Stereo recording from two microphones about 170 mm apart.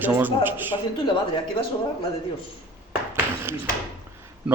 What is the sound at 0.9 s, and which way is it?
Speech, 30° left (ahead or behind).